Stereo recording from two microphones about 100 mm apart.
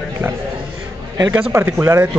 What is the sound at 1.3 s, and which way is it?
Speech, 25° right (ahead or behind).